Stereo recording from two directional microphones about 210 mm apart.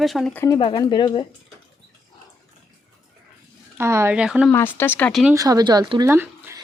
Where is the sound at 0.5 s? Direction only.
20° left (ahead or behind).